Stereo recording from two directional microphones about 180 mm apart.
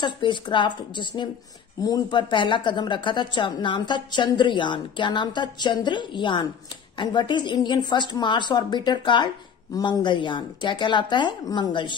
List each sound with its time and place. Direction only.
0.0 s a woman's voice: 25° left (ahead or behind)